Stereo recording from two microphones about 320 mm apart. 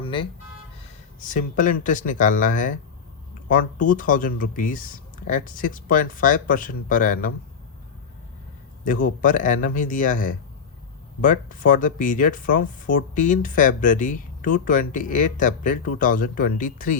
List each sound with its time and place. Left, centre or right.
0.0 s vehicle: centre
1.2 s speech: left
8.8 s speech: left